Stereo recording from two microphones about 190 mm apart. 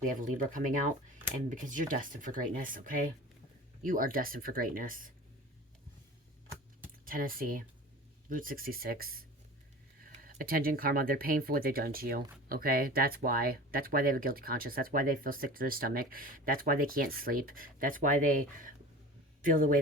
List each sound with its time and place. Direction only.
0.0 s speech: 45° right (ahead or behind)
7.0 s speech: 45° right (ahead or behind)